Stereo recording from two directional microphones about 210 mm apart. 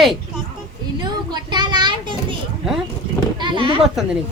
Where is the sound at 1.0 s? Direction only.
20° right (ahead or behind).